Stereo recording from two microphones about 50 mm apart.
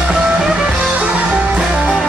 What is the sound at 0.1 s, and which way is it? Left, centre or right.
Music, centre.